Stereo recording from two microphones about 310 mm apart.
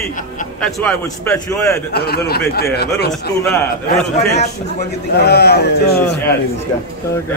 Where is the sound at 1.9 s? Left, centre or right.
Left.